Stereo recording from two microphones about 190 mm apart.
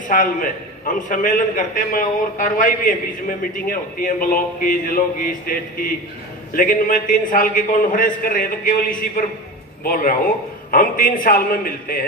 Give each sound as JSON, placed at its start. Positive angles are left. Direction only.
{"t": 0.1, "sound": "a man's voice", "side_deg": 45}